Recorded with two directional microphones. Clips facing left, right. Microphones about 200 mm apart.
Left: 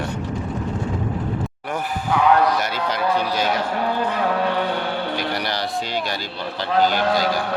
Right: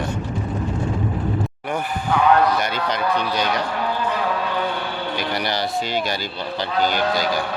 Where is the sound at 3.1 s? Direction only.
5° left (ahead or behind).